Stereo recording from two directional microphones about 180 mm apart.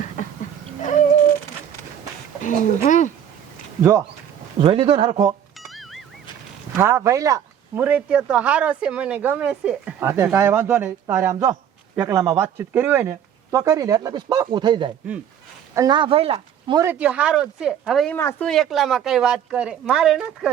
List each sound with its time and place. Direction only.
2.4 s speech: 45° left (ahead or behind)
4.6 s speech: 30° right (ahead or behind)
5.6 s music: centre (ahead or behind)
6.7 s speech: 15° right (ahead or behind); by 16.8 s 30° right (ahead or behind)
16.8 s a woman's voice: 10° right (ahead or behind)
18.1 s speech: 10° left (ahead or behind)
18.4 s a woman's voice: centre (ahead or behind)